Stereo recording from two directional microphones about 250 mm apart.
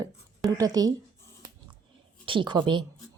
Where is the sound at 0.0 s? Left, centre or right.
Centre.